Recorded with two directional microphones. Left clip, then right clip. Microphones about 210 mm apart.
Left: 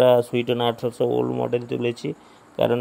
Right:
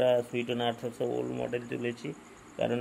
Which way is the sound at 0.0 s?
40° left (ahead or behind).